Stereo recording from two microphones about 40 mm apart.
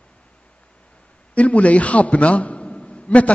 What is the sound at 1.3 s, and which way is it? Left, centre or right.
A man's voice, left.